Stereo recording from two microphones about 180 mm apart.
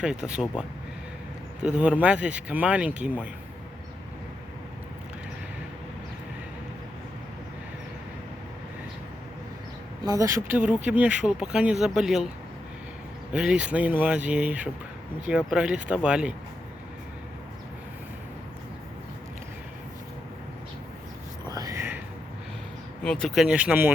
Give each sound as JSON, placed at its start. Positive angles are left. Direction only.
{"t": 0.0, "sound": "speech", "side_deg": -5}
{"t": 1.6, "sound": "speech", "side_deg": -5}
{"t": 10.1, "sound": "speech", "side_deg": -20}
{"t": 13.3, "sound": "speech", "side_deg": -5}
{"t": 21.5, "sound": "a sound", "side_deg": -20}
{"t": 23.0, "sound": "speech", "side_deg": 5}